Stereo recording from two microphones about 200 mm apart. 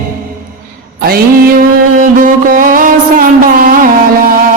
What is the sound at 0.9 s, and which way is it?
Mantra, 50° right (ahead or behind).